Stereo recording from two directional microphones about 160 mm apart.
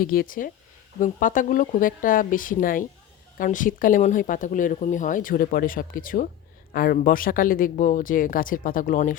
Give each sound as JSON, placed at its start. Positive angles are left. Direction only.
{"t": 0.0, "sound": "speech", "side_deg": 65}